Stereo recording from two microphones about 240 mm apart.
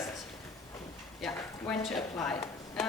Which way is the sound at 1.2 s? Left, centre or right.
Centre.